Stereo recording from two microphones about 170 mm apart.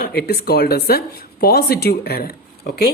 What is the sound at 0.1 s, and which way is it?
A woman's voice, 65° left (ahead or behind).